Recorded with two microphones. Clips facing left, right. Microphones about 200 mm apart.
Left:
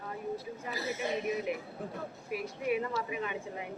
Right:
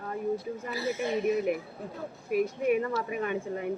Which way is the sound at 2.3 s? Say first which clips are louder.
Right 7 dB; 50° right (ahead or behind).